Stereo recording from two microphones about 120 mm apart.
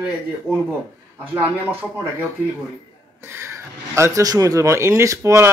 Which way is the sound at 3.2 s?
20° right (ahead or behind).